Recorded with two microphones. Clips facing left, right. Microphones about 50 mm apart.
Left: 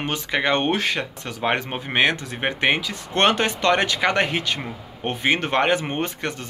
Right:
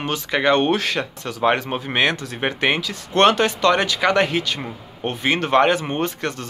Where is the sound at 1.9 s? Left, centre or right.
Centre.